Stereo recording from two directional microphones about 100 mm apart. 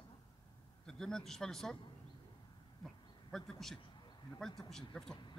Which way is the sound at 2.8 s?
5° left (ahead or behind).